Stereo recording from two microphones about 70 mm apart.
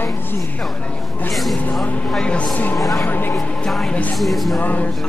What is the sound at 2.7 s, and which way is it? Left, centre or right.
Speech, centre.